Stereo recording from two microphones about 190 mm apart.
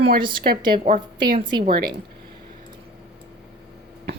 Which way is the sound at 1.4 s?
25° right (ahead or behind).